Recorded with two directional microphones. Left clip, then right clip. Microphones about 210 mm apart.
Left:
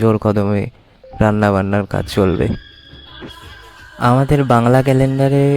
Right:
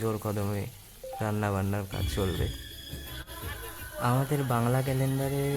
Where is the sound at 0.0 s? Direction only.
35° left (ahead or behind).